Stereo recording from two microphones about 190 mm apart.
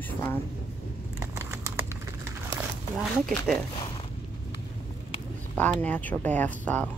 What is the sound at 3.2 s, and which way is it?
Speech, 5° left (ahead or behind).